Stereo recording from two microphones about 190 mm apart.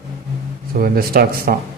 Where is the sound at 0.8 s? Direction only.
50° right (ahead or behind).